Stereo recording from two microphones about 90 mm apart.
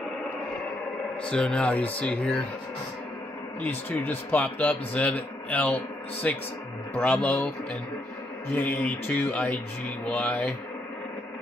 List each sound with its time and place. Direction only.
1.2 s speech: 10° left (ahead or behind)
3.6 s speech: 20° left (ahead or behind)